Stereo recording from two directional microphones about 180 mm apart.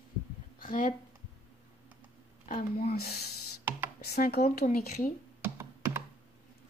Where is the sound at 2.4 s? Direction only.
50° left (ahead or behind).